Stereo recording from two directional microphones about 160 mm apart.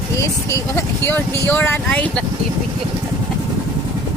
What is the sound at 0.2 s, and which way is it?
Speech, 15° left (ahead or behind).